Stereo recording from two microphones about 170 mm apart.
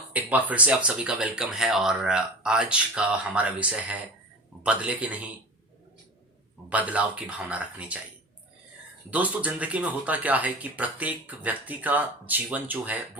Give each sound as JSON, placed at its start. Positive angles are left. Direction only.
{"t": 0.1, "sound": "speech", "side_deg": -10}
{"t": 6.7, "sound": "speech", "side_deg": -10}
{"t": 9.0, "sound": "speech", "side_deg": -10}